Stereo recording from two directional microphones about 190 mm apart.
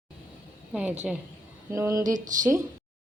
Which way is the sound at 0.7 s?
5° right (ahead or behind).